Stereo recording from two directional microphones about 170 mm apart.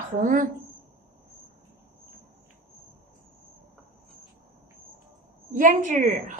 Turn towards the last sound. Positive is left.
turn(degrees=-50)  # may be behind; listen again after turning